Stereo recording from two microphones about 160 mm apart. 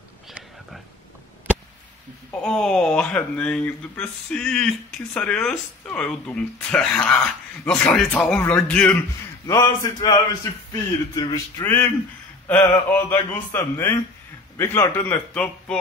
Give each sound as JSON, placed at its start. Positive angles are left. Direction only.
{"t": 2.3, "sound": "speech", "side_deg": 5}
{"t": 9.5, "sound": "speech", "side_deg": 20}
{"t": 12.9, "sound": "speech", "side_deg": 15}